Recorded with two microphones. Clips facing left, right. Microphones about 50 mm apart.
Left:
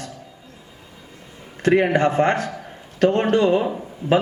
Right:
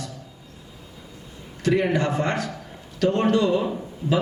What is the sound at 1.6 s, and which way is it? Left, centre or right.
A man's voice, left.